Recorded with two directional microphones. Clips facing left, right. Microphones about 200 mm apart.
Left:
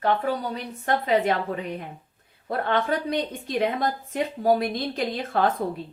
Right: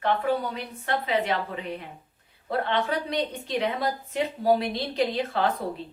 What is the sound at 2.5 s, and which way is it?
A woman's voice, 50° left (ahead or behind).